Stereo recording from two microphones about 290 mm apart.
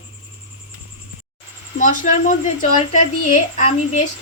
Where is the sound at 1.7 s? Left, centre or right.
Left.